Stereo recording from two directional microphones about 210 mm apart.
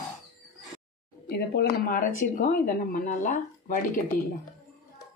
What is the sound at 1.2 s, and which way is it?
Speech, 50° left (ahead or behind).